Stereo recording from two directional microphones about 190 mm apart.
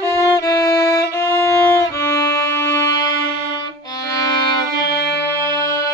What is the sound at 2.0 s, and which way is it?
Music, 15° left (ahead or behind).